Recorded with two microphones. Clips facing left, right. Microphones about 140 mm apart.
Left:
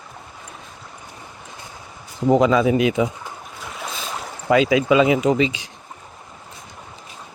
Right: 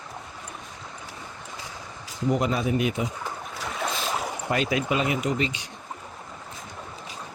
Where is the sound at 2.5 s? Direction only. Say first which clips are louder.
Left 8 dB; 90° left.